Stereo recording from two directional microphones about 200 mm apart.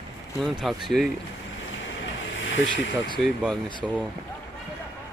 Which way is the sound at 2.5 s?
70° left (ahead or behind).